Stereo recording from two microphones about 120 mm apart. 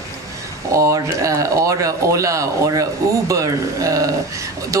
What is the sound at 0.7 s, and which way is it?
Speech, 25° right (ahead or behind).